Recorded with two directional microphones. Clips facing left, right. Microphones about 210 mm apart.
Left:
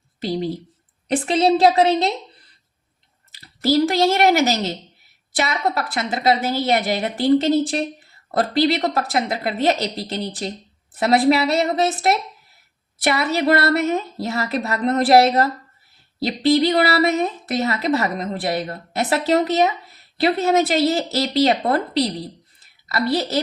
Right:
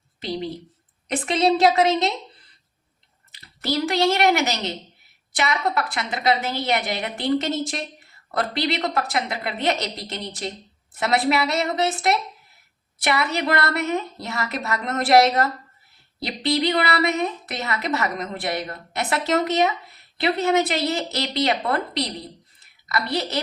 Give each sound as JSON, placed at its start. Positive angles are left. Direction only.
{"t": 0.2, "sound": "a woman's voice", "side_deg": 35}
{"t": 3.3, "sound": "a woman's voice", "side_deg": 35}